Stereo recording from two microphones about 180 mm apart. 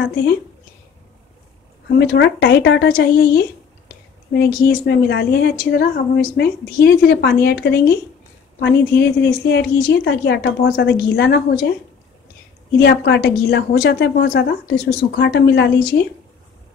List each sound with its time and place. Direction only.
0.0 s a woman's voice: 65° left (ahead or behind)
1.9 s a woman's voice: 70° left (ahead or behind)
12.8 s a woman's voice: 70° left (ahead or behind)